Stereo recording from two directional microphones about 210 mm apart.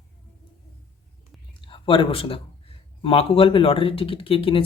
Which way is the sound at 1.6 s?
25° left (ahead or behind).